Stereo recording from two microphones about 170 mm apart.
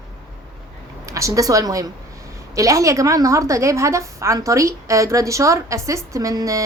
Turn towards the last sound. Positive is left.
turn(degrees=-20)  # may be behind; listen again after turning